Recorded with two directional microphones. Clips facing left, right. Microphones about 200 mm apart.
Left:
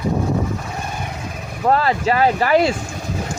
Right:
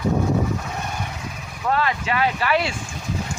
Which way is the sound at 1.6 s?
40° left (ahead or behind).